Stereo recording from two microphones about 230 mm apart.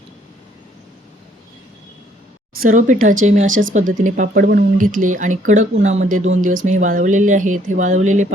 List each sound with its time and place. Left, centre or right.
2.6 s speech: right